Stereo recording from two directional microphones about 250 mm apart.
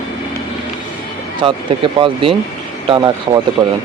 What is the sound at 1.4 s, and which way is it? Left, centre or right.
Speech, centre.